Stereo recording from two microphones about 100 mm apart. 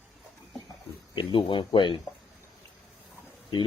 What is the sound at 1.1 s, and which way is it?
Speech, 55° left (ahead or behind).